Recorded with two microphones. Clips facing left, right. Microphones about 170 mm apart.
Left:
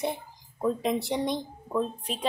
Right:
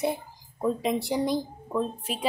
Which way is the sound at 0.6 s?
5° right (ahead or behind).